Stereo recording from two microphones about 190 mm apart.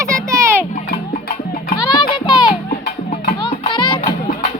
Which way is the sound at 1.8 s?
20° left (ahead or behind).